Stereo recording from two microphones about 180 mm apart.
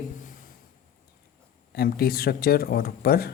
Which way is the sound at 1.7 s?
55° left (ahead or behind).